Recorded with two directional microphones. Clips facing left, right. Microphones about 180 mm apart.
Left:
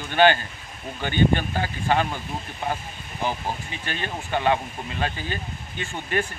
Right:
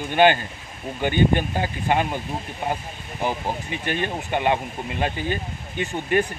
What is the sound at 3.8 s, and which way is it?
Speech, 15° right (ahead or behind).